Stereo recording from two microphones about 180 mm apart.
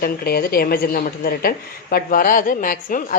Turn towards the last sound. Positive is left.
turn(degrees=50)  # may be behind; listen again after turning